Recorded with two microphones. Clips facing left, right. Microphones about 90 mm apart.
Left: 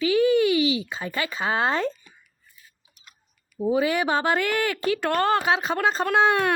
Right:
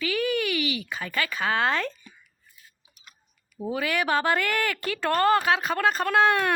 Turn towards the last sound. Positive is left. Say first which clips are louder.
# left 1 dB
turn(degrees=20)  # may be behind; listen again after turning